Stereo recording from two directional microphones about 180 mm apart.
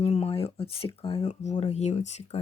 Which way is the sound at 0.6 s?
30° left (ahead or behind).